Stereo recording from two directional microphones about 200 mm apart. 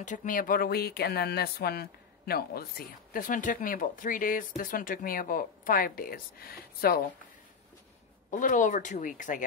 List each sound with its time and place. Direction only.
0.0 s speech: 40° left (ahead or behind)
8.3 s speech: 40° left (ahead or behind)